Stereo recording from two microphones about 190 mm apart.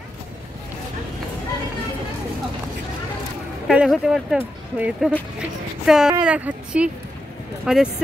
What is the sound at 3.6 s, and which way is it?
Speech, centre (ahead or behind).